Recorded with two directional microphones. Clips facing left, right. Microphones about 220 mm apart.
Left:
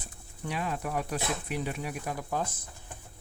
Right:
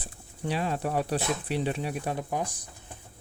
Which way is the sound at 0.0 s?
30° right (ahead or behind).